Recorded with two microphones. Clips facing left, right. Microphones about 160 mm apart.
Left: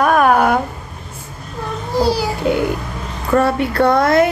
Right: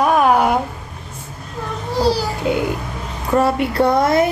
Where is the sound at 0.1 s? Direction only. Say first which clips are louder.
Left 1 dB; 60° left (ahead or behind).